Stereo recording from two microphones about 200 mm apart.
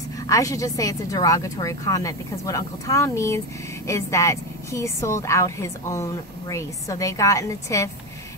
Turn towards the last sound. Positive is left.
turn(degrees=15)  # may be behind; listen again after turning